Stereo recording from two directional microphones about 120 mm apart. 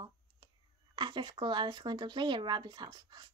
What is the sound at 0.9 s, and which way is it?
Speech, 40° right (ahead or behind).